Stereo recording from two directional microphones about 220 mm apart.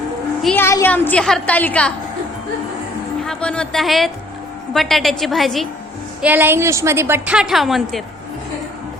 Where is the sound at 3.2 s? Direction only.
5° left (ahead or behind).